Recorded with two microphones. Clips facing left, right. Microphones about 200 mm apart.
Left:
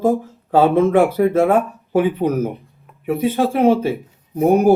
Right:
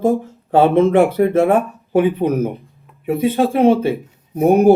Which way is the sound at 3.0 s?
25° right (ahead or behind).